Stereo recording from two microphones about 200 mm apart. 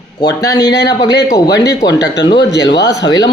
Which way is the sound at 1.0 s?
20° left (ahead or behind).